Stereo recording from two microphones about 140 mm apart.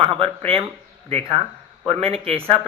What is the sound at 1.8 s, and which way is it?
Speech, 45° right (ahead or behind).